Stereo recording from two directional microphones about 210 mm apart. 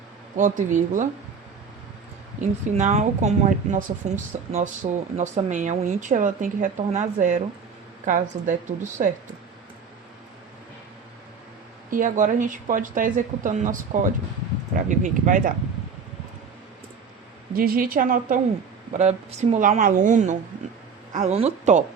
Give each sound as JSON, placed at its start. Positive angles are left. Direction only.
{"t": 0.3, "sound": "a woman's voice", "side_deg": -35}
{"t": 2.4, "sound": "a woman's voice", "side_deg": -35}
{"t": 11.9, "sound": "a woman's voice", "side_deg": -40}
{"t": 17.5, "sound": "a woman's voice", "side_deg": -45}